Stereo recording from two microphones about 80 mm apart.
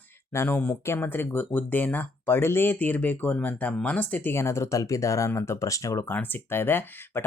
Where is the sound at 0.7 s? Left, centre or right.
Left.